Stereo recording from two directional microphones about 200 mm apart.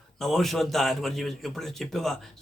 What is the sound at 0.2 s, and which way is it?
A man's voice, centre (ahead or behind).